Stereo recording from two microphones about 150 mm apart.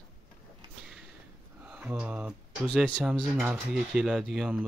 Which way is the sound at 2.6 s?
Centre (ahead or behind).